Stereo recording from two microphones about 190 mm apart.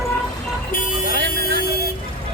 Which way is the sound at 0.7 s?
45° left (ahead or behind).